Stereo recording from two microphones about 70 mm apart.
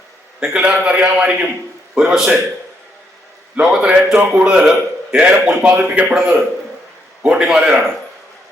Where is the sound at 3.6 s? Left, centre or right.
Centre.